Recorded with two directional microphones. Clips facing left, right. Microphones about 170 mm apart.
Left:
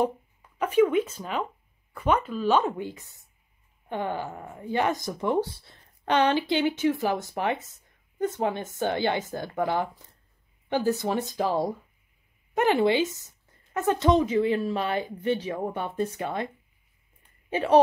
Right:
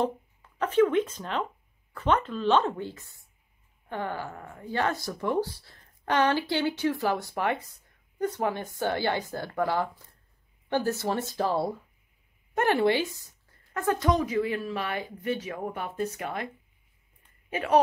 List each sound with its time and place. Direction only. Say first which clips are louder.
0.6 s speech: left 1 dB; 10° left (ahead or behind); by 16.4 s 25° left (ahead or behind)
17.5 s speech: left 4 dB; 30° left (ahead or behind)